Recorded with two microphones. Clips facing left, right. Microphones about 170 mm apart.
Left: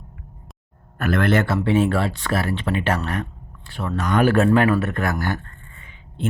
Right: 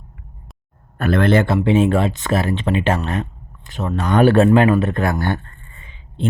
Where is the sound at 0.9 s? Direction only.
25° right (ahead or behind).